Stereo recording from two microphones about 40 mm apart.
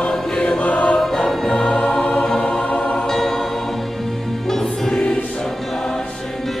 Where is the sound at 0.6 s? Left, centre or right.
Left.